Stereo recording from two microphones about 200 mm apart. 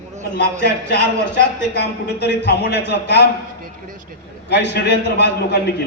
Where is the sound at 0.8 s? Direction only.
55° left (ahead or behind).